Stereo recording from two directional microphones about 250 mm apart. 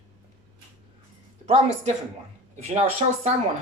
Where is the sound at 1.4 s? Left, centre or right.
Right.